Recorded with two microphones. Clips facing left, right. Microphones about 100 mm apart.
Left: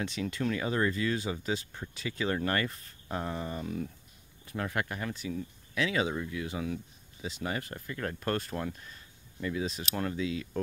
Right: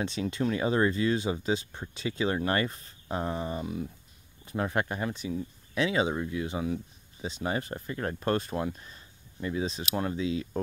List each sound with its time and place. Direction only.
0.0 s speech: 25° right (ahead or behind)